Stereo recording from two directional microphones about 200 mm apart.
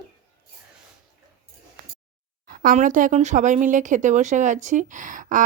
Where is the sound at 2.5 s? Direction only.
45° right (ahead or behind).